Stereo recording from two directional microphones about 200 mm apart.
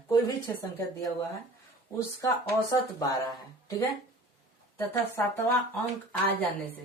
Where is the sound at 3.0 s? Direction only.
15° left (ahead or behind).